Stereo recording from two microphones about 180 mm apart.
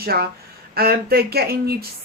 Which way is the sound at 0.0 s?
60° right (ahead or behind).